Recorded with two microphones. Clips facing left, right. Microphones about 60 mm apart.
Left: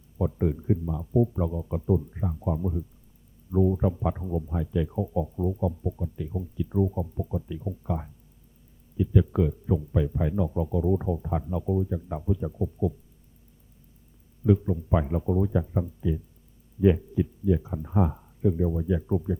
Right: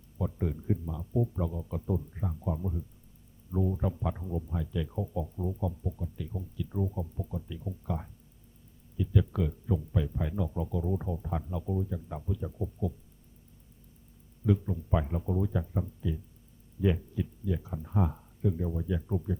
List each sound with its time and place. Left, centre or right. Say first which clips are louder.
0.2 s speech: left 7 dB; centre
14.4 s speech: left 6 dB; centre